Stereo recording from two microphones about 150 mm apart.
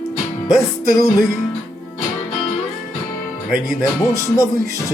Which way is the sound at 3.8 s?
20° left (ahead or behind).